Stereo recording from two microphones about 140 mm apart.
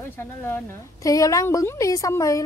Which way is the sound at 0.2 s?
15° left (ahead or behind).